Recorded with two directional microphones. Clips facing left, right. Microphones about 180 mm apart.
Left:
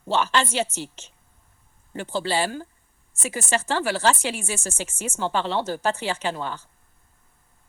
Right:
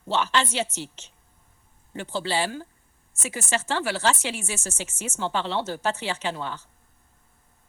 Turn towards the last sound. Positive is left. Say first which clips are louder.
# left 2 dB
turn(degrees=45)  # may be behind; listen again after turning